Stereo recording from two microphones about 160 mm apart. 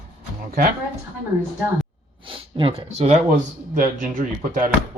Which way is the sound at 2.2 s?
35° right (ahead or behind).